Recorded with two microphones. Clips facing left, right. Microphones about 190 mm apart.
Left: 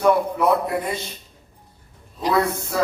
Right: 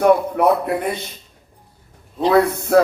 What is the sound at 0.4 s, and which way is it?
Speech, 60° right (ahead or behind).